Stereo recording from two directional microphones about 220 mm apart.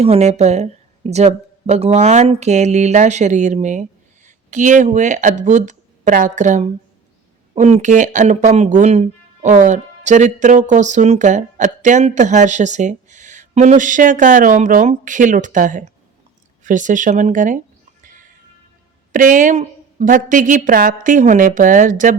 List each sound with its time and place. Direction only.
0.0 s a woman's voice: 30° right (ahead or behind)
19.1 s speech: 35° right (ahead or behind)